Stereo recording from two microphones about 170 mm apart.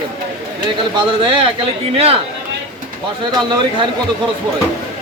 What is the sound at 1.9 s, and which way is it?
Speech, 35° right (ahead or behind).